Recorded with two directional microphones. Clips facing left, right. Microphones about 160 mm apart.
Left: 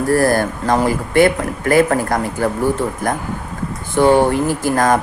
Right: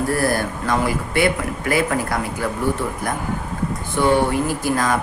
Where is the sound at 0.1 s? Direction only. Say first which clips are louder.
Left 6 dB; 45° left (ahead or behind).